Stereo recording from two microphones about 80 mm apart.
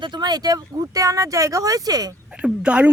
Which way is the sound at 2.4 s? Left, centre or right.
Centre.